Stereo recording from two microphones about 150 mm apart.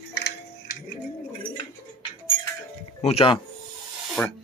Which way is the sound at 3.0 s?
40° left (ahead or behind).